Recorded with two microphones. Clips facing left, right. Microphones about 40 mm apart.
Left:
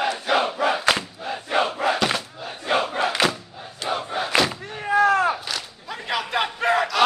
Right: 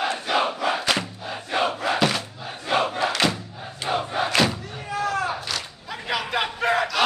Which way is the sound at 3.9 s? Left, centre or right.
Centre.